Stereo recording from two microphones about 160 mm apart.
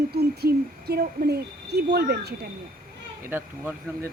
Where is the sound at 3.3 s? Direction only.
15° right (ahead or behind).